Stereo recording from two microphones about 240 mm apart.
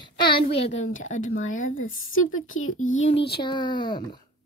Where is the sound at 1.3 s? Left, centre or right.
Left.